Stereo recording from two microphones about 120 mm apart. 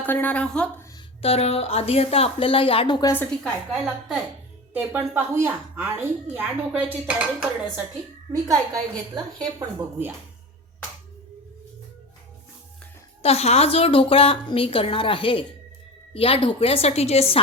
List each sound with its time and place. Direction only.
0.0 s a woman's voice: 15° left (ahead or behind)
1.2 s a woman's voice: 55° left (ahead or behind); by 3.1 s 40° left (ahead or behind)
3.4 s a woman's voice: centre (ahead or behind)
4.7 s a woman's voice: 15° right (ahead or behind)
8.3 s a woman's voice: 30° right (ahead or behind)
13.2 s a woman's voice: 60° left (ahead or behind)